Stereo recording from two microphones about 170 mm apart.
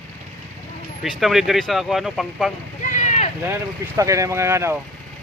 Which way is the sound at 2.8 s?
45° left (ahead or behind).